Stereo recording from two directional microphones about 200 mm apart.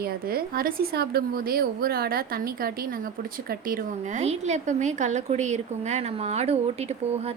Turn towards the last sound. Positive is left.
turn(degrees=-30)  # may be behind; listen again after turning